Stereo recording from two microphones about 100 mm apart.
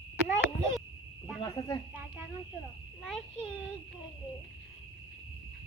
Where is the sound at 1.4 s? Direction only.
40° left (ahead or behind).